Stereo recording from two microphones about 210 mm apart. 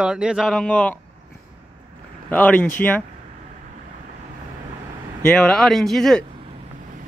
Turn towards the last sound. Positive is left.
turn(degrees=0)  # may be behind; listen again after turning